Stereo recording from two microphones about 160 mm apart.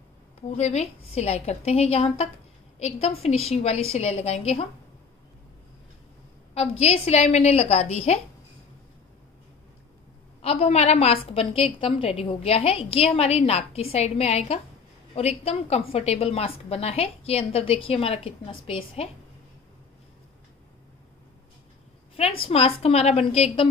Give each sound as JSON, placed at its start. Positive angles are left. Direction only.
{"t": 0.6, "sound": "a woman's voice", "side_deg": 45}
{"t": 6.5, "sound": "a woman's voice", "side_deg": 40}
{"t": 10.4, "sound": "a woman's voice", "side_deg": 40}
{"t": 22.4, "sound": "a woman's voice", "side_deg": 35}